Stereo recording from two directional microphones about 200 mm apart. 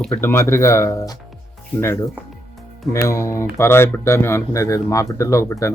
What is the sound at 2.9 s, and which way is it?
Speech, 15° left (ahead or behind).